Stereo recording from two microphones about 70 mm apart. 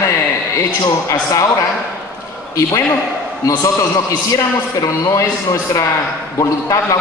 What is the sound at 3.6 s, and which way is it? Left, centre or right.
A man's voice, left.